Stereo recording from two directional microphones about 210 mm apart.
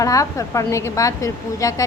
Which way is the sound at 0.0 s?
15° left (ahead or behind).